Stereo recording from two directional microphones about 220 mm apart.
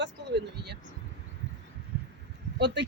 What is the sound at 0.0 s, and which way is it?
Speech, 50° right (ahead or behind).